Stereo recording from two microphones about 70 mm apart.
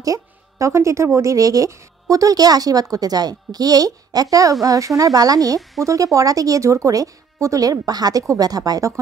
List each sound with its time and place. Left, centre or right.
0.0 s speech: right